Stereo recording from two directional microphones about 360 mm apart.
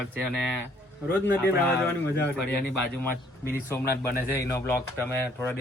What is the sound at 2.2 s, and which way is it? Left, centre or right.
Speech, centre.